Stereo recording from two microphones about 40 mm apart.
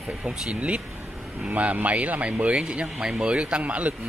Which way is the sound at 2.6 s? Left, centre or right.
Right.